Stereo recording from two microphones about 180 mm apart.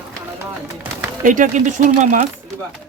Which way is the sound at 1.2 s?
45° right (ahead or behind).